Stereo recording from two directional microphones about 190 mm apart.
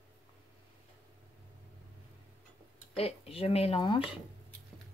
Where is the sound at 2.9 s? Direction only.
30° left (ahead or behind).